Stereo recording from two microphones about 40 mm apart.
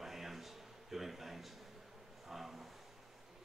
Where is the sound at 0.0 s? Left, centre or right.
Centre.